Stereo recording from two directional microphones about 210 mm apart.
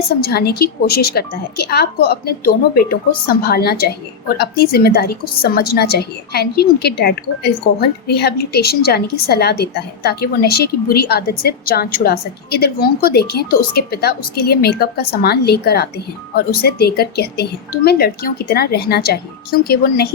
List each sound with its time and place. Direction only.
0.1 s a woman's voice: 50° left (ahead or behind)